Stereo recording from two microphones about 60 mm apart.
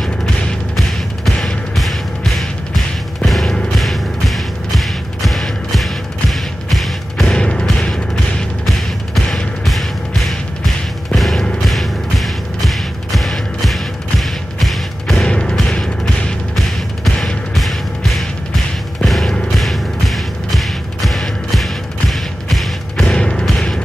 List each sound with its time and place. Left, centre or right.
0.0 s music: centre
7.3 s music: centre
15.2 s music: centre
16.5 s music: centre
23.1 s music: centre